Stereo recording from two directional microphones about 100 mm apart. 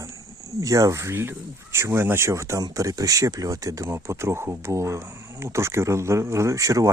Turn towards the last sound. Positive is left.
turn(degrees=-35)  # may be behind; listen again after turning